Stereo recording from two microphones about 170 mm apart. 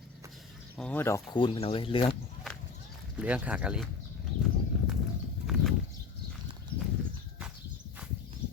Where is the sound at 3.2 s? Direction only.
5° right (ahead or behind).